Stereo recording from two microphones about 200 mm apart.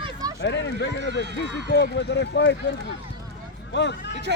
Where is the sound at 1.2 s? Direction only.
60° right (ahead or behind).